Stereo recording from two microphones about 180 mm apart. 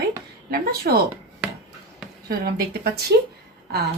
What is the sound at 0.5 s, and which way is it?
Speech, 60° right (ahead or behind).